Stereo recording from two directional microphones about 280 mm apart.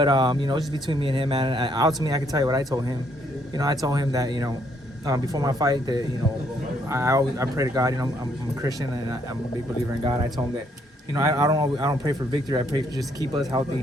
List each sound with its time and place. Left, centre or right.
0.0 s speech: centre
9.9 s speech: centre